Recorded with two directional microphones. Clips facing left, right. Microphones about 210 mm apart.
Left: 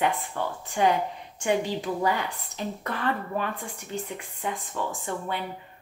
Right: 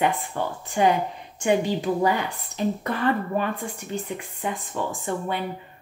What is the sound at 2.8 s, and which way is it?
Speech, 5° right (ahead or behind).